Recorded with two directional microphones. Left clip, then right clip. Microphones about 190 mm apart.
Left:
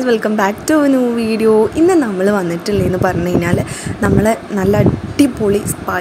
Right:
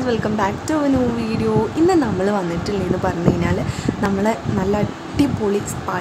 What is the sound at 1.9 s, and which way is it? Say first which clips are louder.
Speech: left 4 dB; 20° left (ahead or behind).